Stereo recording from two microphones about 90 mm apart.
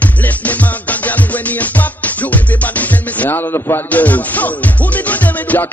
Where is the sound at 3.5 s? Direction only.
30° left (ahead or behind).